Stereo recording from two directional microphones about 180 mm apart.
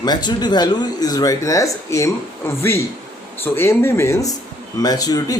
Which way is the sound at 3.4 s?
15° left (ahead or behind).